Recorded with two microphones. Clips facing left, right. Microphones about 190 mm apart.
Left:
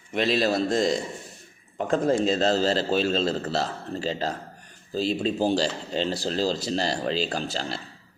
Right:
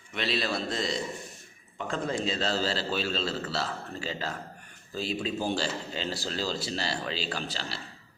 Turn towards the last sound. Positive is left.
turn(degrees=40)  # may be behind; listen again after turning